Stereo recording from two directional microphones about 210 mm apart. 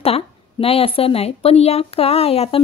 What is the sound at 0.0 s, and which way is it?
A woman's voice, 30° left (ahead or behind).